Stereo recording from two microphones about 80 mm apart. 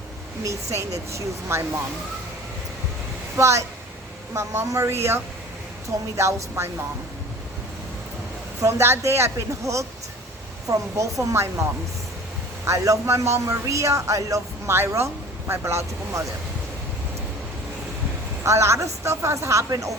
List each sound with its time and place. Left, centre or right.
0.4 s speech: right
3.3 s speech: right
8.6 s speech: right
12.6 s speech: right
14.7 s speech: right
18.4 s speech: right